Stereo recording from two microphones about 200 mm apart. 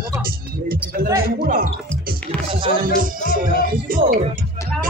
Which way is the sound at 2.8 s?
45° right (ahead or behind).